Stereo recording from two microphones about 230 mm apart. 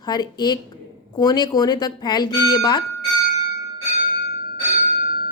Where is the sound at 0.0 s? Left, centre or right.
Centre.